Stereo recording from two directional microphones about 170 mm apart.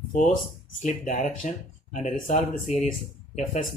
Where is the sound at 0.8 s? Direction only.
50° left (ahead or behind).